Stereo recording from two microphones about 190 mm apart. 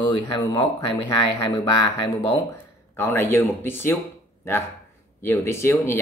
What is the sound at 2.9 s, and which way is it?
Speech, 15° left (ahead or behind).